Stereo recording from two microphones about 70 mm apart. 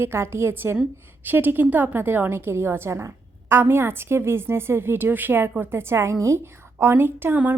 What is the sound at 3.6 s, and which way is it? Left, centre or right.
A woman's voice, right.